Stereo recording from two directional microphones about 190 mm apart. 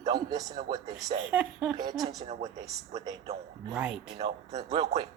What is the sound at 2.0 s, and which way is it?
Speech, 30° right (ahead or behind).